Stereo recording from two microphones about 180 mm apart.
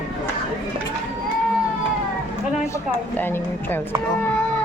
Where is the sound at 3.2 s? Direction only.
10° left (ahead or behind).